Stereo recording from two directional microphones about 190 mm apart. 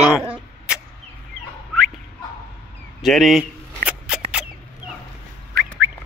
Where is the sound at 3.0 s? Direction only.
Centre (ahead or behind).